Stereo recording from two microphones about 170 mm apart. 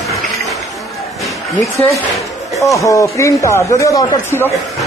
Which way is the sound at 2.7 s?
20° left (ahead or behind).